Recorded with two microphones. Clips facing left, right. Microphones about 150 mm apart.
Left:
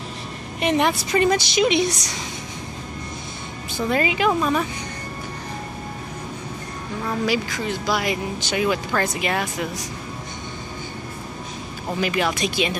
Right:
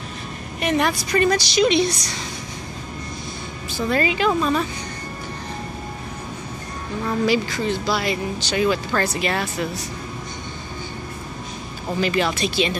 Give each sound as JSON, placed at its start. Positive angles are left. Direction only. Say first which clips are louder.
{"t": 0.6, "sound": "a woman's voice", "louder": "left 1 dB", "side_deg": 20}
{"t": 3.7, "sound": "speech", "louder": "right 1 dB", "side_deg": 15}
{"t": 7.2, "sound": "speech", "louder": "right 4 dB", "side_deg": 10}
{"t": 12.0, "sound": "speech", "louder": "right 1 dB", "side_deg": 10}